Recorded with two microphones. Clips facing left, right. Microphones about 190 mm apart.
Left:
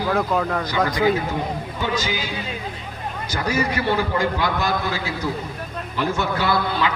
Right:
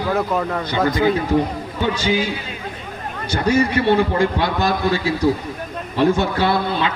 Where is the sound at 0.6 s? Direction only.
25° right (ahead or behind).